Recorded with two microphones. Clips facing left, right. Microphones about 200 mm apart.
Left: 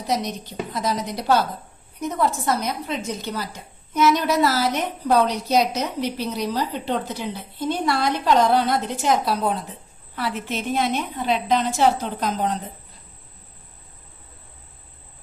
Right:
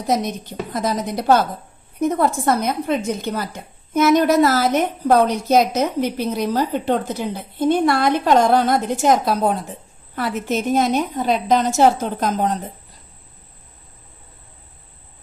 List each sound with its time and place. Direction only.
0.1 s a woman's voice: 50° right (ahead or behind)